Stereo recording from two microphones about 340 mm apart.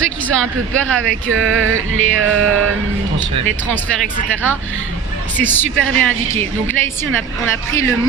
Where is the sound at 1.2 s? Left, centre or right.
Right.